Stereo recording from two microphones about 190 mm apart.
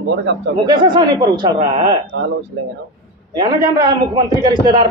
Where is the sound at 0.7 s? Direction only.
20° right (ahead or behind).